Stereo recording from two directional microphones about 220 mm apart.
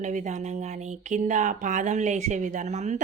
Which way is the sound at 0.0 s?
35° right (ahead or behind).